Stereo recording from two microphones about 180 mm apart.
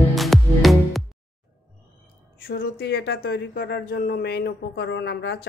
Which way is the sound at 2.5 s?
60° left (ahead or behind).